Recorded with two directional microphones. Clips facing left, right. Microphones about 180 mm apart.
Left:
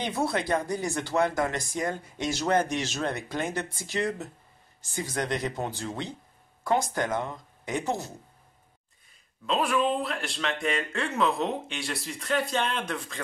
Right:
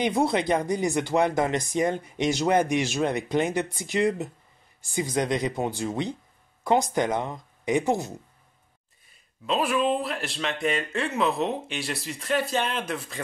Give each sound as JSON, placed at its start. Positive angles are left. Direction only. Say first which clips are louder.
{"t": 0.0, "sound": "speech", "louder": "right 5 dB", "side_deg": -20}
{"t": 9.5, "sound": "speech", "louder": "right 2 dB", "side_deg": -5}